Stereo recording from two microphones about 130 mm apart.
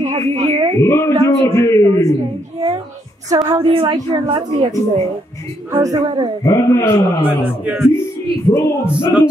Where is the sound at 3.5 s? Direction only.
45° right (ahead or behind).